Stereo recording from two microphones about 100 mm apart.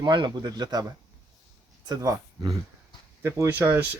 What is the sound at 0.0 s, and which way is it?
Speech, 45° right (ahead or behind).